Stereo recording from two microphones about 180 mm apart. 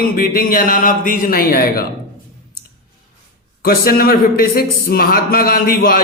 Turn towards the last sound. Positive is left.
turn(degrees=55)  # may be behind; listen again after turning